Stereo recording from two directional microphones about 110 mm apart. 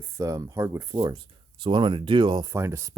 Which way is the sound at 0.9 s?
45° right (ahead or behind).